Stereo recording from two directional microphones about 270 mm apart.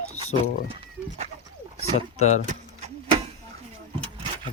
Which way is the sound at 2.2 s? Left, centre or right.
Left.